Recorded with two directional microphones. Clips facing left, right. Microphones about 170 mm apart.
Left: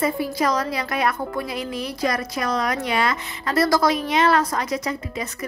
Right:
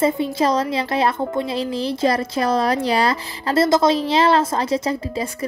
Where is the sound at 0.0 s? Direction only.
25° right (ahead or behind).